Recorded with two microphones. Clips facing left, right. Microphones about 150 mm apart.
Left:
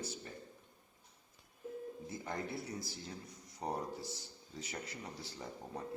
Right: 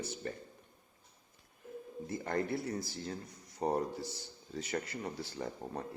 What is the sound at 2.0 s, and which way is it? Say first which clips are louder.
Speech: right 9 dB; 65° right (ahead or behind).